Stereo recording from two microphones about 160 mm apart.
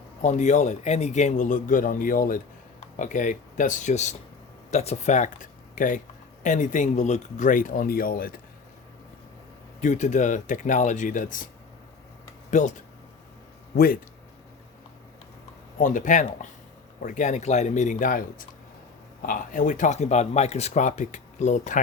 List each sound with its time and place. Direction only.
0.2 s speech: 50° left (ahead or behind); by 8.4 s 65° left (ahead or behind)
9.8 s speech: 50° left (ahead or behind)
12.5 s speech: 50° left (ahead or behind)
13.7 s speech: 65° left (ahead or behind)
15.8 s speech: 55° left (ahead or behind)